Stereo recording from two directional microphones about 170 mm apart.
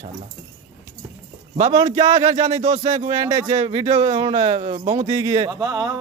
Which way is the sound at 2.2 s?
40° right (ahead or behind).